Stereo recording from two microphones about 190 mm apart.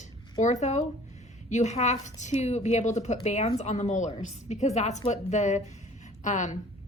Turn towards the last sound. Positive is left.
turn(degrees=40)  # may be behind; listen again after turning